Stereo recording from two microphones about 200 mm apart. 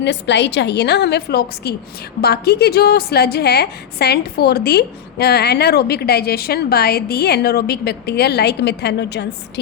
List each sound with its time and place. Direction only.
0.0 s a woman's voice: 60° left (ahead or behind)